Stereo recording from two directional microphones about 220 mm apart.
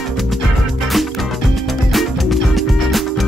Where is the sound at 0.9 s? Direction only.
Centre (ahead or behind).